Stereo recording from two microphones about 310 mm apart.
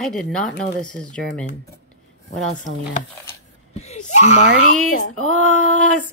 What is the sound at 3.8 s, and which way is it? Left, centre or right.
Speech, left.